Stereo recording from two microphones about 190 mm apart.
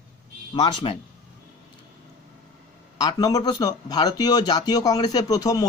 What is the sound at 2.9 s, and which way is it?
A man's voice, 20° left (ahead or behind).